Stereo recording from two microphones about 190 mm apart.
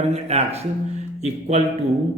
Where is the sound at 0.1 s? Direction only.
35° right (ahead or behind).